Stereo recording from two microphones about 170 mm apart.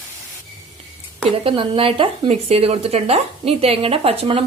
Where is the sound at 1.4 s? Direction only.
30° right (ahead or behind).